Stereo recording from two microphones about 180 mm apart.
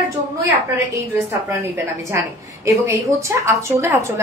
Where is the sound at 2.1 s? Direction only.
15° right (ahead or behind).